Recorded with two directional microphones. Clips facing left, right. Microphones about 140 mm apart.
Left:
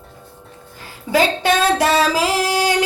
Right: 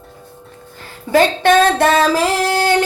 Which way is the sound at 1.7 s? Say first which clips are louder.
Right 3 dB; 50° right (ahead or behind).